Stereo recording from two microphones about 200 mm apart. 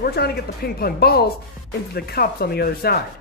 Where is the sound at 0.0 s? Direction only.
50° left (ahead or behind).